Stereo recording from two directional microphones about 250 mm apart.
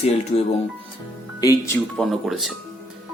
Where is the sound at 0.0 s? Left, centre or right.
Left.